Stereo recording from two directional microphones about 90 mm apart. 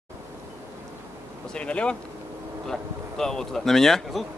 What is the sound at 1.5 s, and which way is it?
Speech, 10° left (ahead or behind).